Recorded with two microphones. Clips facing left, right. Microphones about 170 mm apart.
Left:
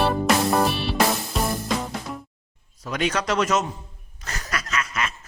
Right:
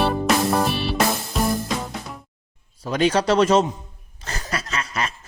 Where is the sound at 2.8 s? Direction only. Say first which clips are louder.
Right 6 dB; 30° right (ahead or behind).